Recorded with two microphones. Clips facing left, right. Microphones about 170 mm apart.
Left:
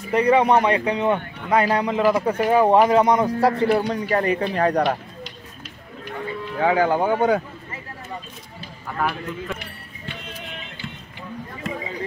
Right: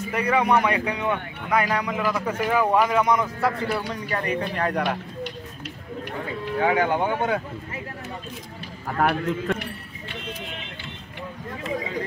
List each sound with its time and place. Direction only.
0.1 s speech: 30° left (ahead or behind)
6.6 s speech: 30° left (ahead or behind)
8.8 s a man's voice: 60° right (ahead or behind)